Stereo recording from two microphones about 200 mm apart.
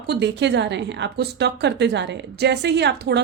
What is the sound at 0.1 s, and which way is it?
A woman's voice, 60° right (ahead or behind).